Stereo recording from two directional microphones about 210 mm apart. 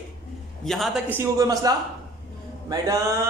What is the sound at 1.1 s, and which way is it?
Speech, 15° right (ahead or behind).